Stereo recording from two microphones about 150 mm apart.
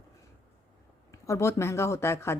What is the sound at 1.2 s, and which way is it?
Speech, 20° left (ahead or behind).